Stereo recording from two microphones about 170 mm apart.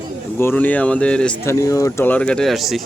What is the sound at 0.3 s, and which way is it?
Speech, 10° left (ahead or behind).